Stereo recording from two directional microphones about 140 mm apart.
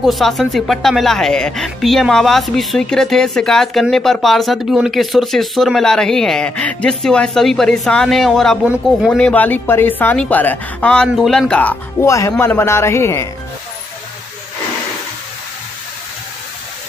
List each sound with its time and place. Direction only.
0.0 s a woman's voice: centre (ahead or behind)
12.0 s speech: 20° left (ahead or behind)